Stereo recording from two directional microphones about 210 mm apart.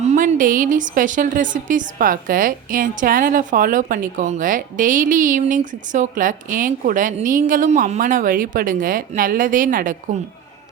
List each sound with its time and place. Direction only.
0.0 s speech: 35° right (ahead or behind)